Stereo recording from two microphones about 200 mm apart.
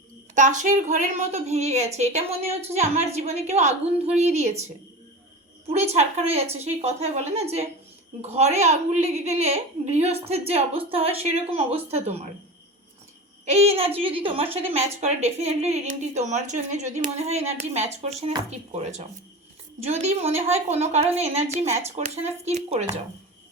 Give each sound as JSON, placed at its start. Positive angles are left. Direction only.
{"t": 0.3, "sound": "a woman's voice", "side_deg": -40}
{"t": 5.6, "sound": "a woman's voice", "side_deg": -30}
{"t": 13.4, "sound": "a woman's voice", "side_deg": -35}